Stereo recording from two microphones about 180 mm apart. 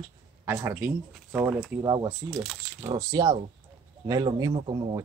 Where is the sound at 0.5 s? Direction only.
10° right (ahead or behind).